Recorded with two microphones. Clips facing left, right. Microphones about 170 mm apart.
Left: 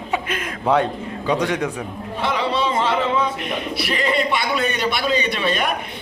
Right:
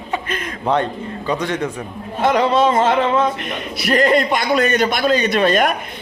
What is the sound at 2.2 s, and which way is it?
A man's voice, 45° right (ahead or behind).